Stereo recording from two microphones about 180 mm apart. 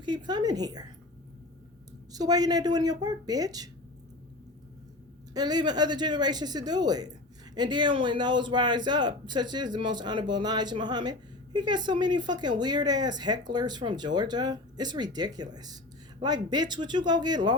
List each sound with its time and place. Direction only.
0.0 s speech: 25° right (ahead or behind)
2.1 s speech: 20° right (ahead or behind)
5.3 s speech: 20° right (ahead or behind)